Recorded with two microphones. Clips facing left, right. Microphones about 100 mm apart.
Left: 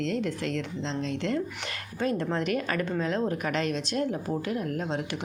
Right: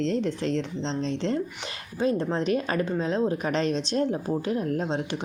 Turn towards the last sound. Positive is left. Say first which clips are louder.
# right 3 dB
turn(degrees=-25)  # may be behind; listen again after turning